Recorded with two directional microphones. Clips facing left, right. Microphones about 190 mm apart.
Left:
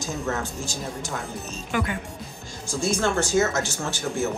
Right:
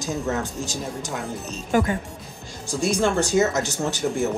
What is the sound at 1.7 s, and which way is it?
Speech, 40° right (ahead or behind).